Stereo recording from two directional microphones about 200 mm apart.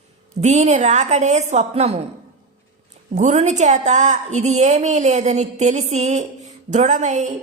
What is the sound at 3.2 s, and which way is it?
A woman's voice, 35° right (ahead or behind).